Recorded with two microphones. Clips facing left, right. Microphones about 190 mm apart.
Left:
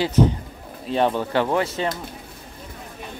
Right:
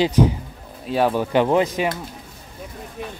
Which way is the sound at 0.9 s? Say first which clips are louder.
Right 1 dB; 5° right (ahead or behind).